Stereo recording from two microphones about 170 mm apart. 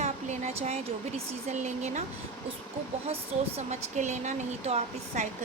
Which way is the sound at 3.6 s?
45° right (ahead or behind).